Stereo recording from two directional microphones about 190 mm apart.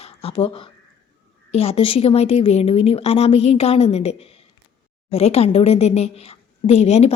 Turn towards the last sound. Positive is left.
turn(degrees=35)  # may be behind; listen again after turning